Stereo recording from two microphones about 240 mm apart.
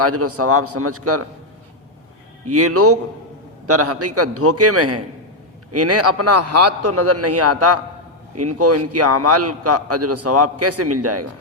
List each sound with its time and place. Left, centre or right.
0.0 s a man's voice: right
2.5 s a man's voice: right